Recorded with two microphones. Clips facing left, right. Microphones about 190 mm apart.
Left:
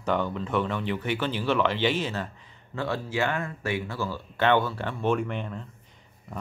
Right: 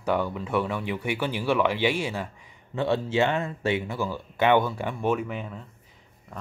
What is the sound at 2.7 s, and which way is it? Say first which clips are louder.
Speech: right 5 dB; 20° right (ahead or behind).